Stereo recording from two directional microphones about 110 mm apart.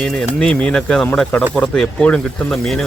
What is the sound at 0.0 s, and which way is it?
Speech, 5° left (ahead or behind).